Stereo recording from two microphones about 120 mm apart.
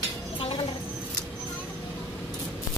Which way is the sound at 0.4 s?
50° left (ahead or behind).